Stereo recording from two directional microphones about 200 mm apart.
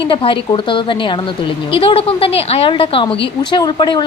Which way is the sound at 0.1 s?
25° left (ahead or behind).